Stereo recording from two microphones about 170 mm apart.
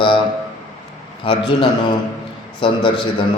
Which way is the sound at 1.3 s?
30° left (ahead or behind).